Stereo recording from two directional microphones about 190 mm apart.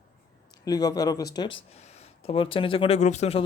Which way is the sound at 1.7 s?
35° left (ahead or behind).